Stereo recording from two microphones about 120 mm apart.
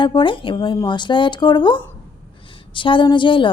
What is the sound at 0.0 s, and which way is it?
A woman's voice, 40° left (ahead or behind).